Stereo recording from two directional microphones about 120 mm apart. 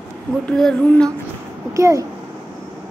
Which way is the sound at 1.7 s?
25° right (ahead or behind).